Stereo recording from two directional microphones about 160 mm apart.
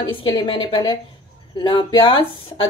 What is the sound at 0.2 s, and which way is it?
Speech, 30° left (ahead or behind).